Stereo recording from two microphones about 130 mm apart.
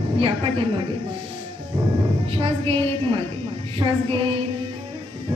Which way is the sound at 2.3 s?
45° right (ahead or behind).